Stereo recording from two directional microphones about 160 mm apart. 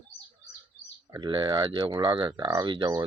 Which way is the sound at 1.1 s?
30° right (ahead or behind).